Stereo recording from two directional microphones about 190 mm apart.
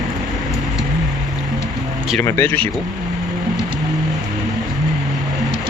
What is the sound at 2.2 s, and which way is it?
Speech, 15° left (ahead or behind).